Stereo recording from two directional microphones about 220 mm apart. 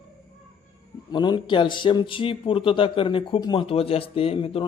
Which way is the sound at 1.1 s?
20° left (ahead or behind).